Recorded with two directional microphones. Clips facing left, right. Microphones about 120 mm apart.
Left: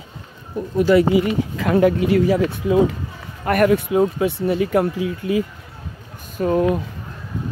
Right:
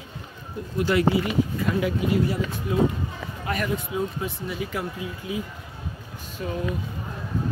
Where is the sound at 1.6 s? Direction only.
90° left.